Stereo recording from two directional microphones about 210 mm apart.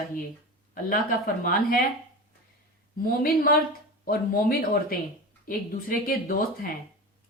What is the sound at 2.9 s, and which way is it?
Speech, 45° left (ahead or behind).